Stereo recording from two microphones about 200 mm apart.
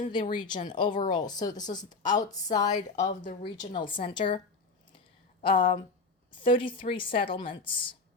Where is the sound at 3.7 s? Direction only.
25° left (ahead or behind).